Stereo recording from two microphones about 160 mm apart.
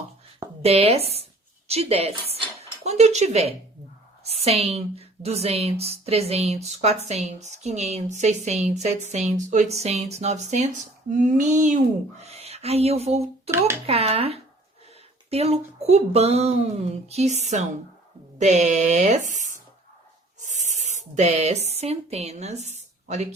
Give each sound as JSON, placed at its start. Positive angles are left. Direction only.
{"t": 0.6, "sound": "a woman's voice", "side_deg": -40}
{"t": 12.2, "sound": "speech", "side_deg": -40}
{"t": 13.5, "sound": "speech", "side_deg": -15}
{"t": 13.8, "sound": "a woman's voice", "side_deg": -40}